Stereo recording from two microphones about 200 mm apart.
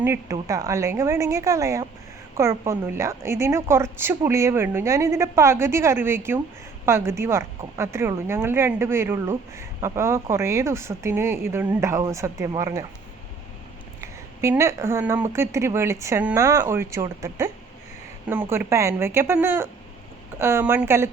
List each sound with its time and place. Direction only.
0.0 s speech: 15° right (ahead or behind)
14.0 s speech: 15° right (ahead or behind)